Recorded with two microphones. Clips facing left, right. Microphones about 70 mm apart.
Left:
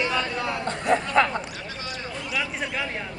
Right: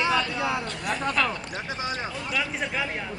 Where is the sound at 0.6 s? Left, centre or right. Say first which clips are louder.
Left 7 dB; left.